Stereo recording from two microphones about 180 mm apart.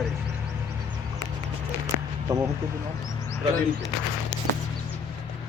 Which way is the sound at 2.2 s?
15° right (ahead or behind).